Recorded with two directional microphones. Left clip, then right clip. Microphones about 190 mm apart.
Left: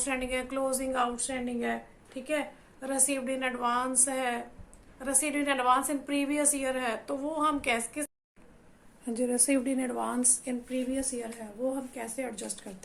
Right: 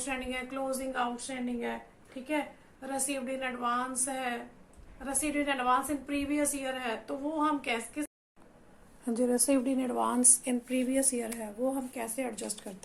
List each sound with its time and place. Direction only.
0.0 s a woman's voice: 45° left (ahead or behind)
2.8 s a woman's voice: 45° left (ahead or behind)
9.0 s a woman's voice: 15° right (ahead or behind)
10.4 s speech: 40° right (ahead or behind)
11.9 s speech: 25° right (ahead or behind)